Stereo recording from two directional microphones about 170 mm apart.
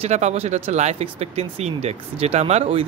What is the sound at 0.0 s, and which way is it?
Speech, 40° right (ahead or behind).